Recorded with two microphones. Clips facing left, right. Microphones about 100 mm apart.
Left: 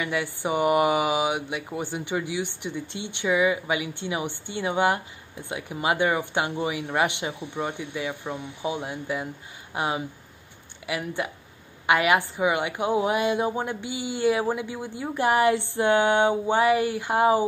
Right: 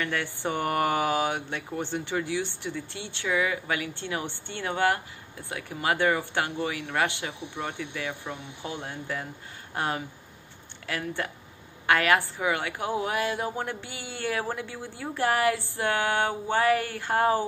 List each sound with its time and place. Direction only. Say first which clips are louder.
0.0 s speech: left 2 dB; 15° left (ahead or behind)